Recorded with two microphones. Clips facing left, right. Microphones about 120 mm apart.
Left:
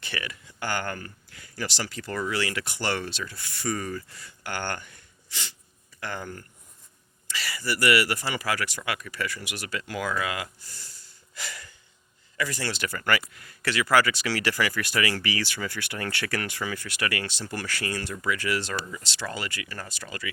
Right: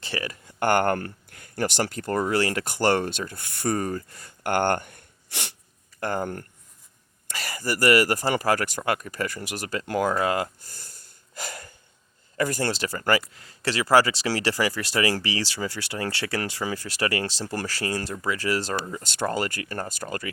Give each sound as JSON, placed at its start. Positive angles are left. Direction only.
{"t": 0.0, "sound": "speech", "side_deg": -35}
{"t": 6.0, "sound": "speech", "side_deg": -45}